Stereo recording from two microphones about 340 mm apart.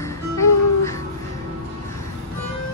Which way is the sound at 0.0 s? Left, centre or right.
Centre.